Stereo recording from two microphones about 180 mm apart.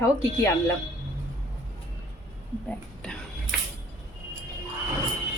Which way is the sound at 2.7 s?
5° left (ahead or behind).